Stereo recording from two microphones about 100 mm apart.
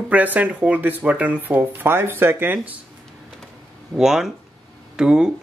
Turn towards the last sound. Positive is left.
turn(degrees=-5)  # may be behind; listen again after turning